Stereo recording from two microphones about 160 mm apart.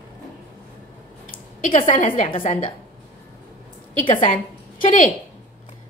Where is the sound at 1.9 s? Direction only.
55° left (ahead or behind).